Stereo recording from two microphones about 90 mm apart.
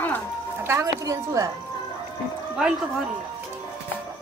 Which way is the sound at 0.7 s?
35° right (ahead or behind).